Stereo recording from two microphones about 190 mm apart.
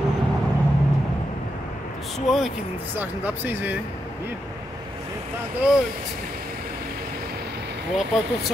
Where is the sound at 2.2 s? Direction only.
Centre (ahead or behind).